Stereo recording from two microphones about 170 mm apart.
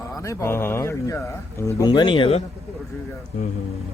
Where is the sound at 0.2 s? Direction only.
15° left (ahead or behind).